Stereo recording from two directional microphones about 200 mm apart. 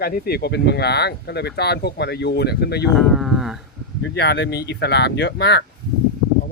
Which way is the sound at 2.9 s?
Centre (ahead or behind).